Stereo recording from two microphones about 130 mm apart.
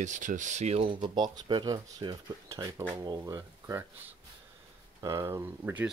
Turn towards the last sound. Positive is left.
turn(degrees=-20)  # may be behind; listen again after turning